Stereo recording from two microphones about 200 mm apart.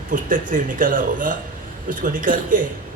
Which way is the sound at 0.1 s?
40° right (ahead or behind).